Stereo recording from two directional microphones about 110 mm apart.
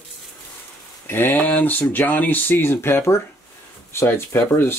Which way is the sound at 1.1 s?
20° left (ahead or behind).